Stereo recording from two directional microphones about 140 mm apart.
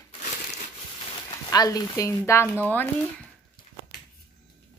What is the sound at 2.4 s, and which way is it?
Speech, 15° right (ahead or behind).